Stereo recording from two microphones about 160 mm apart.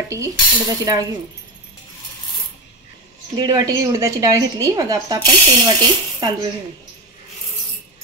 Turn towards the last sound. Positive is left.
turn(degrees=-30)  # may be behind; listen again after turning